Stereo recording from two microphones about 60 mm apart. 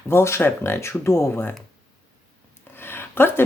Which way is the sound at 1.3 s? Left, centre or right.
Left.